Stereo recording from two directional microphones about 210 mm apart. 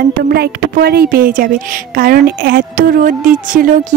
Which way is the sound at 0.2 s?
50° right (ahead or behind).